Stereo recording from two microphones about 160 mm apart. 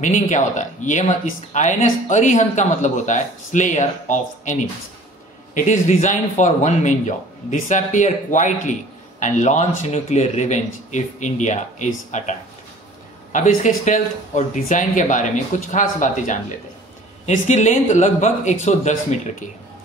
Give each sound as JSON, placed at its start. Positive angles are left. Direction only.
{"t": 0.0, "sound": "speech", "side_deg": 50}